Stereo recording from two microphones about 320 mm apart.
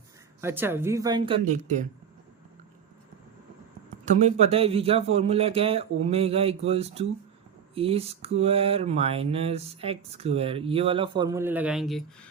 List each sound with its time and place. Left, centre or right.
0.4 s speech: centre; by 1.7 s right
4.0 s speech: right; by 12.3 s centre